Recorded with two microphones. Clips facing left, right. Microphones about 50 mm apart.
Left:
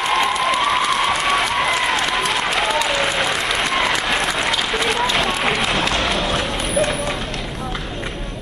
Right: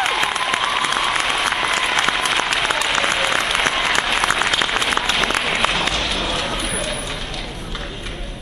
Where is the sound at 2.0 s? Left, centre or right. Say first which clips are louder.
Right 1 dB; right.